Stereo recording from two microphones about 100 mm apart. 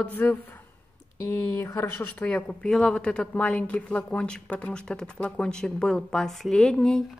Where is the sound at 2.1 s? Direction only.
10° left (ahead or behind).